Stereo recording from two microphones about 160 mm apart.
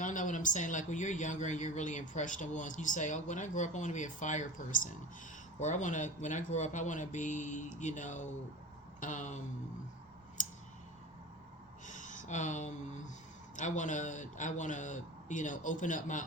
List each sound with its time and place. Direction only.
0.0 s speech: 55° left (ahead or behind)
10.4 s clicking: 50° left (ahead or behind)
11.9 s speech: 50° left (ahead or behind)